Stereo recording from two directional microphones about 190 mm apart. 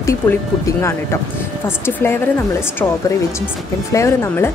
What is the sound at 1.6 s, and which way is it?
Speech, 10° left (ahead or behind).